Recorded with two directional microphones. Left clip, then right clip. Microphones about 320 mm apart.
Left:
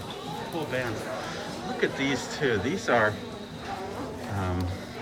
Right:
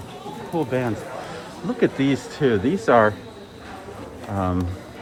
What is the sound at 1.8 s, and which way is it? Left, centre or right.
Speech, centre.